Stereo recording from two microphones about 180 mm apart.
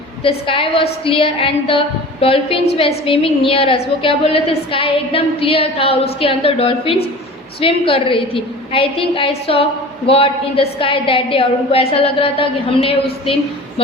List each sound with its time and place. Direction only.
0.2 s a woman's voice: 30° left (ahead or behind)